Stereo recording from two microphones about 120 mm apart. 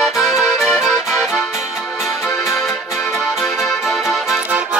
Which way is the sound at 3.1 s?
Centre (ahead or behind).